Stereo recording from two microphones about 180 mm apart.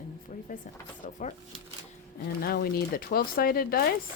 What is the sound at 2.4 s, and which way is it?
Speech, 60° left (ahead or behind).